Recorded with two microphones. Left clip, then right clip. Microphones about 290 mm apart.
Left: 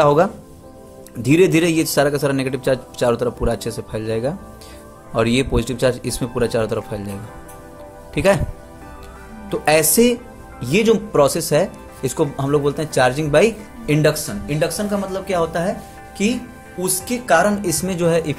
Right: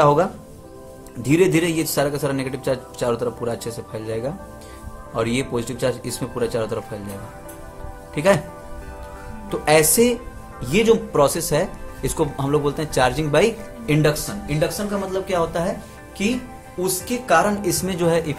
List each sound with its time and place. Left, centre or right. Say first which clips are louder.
0.0 s speech: left 2 dB; centre
8.1 s speech: left 1 dB; centre
9.5 s speech: left 1 dB; centre